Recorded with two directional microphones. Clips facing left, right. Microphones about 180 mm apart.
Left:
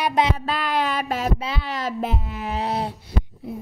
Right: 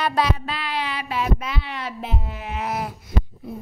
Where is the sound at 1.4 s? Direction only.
35° left (ahead or behind).